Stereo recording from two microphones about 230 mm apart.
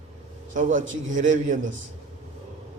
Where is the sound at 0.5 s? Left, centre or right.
Right.